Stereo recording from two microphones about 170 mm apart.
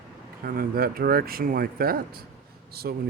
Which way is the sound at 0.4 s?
60° right (ahead or behind).